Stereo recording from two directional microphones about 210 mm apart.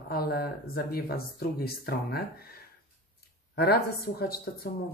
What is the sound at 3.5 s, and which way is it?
Speech, 50° left (ahead or behind).